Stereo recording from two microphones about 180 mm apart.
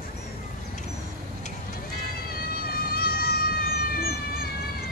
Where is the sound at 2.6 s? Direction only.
55° left (ahead or behind).